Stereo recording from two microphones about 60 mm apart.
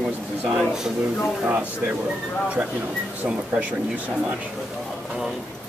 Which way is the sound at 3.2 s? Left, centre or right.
Right.